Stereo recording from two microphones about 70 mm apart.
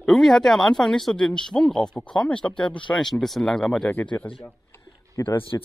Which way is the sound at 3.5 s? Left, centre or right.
Centre.